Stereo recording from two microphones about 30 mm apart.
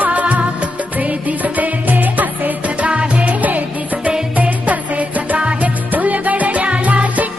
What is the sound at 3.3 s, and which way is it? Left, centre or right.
Music, right.